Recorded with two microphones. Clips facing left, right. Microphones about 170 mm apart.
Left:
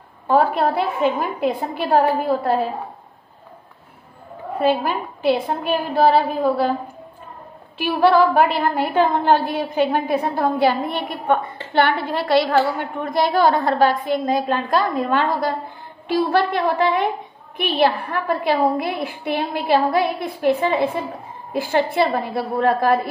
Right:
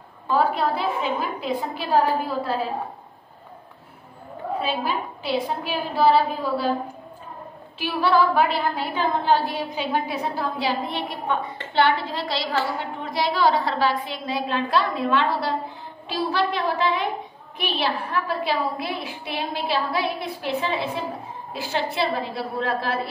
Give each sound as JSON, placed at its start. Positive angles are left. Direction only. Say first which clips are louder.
{"t": 0.3, "sound": "a woman's voice", "louder": "left 4 dB", "side_deg": 55}
{"t": 4.6, "sound": "a woman's voice", "louder": "left 7 dB", "side_deg": 55}
{"t": 7.8, "sound": "a woman's voice", "louder": "left 5 dB", "side_deg": 55}